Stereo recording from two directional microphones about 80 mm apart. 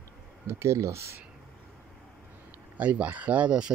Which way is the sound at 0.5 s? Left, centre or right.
Right.